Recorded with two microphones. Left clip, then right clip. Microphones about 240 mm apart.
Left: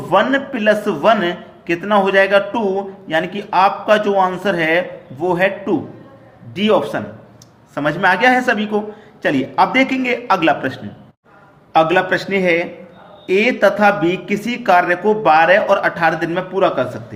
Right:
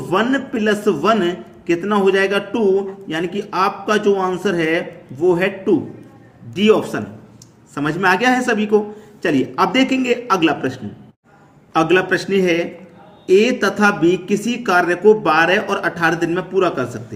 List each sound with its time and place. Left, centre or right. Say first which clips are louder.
0.1 s a man's voice: left 4 dB; centre